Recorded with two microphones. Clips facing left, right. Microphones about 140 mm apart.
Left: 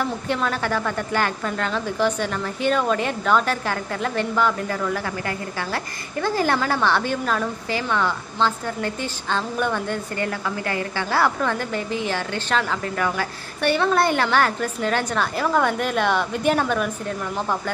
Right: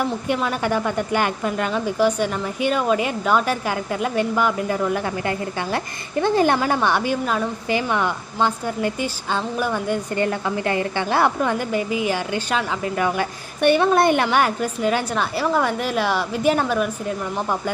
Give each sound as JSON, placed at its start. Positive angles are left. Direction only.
{"t": 0.0, "sound": "a woman's voice", "side_deg": -10}
{"t": 10.1, "sound": "a woman's voice", "side_deg": -25}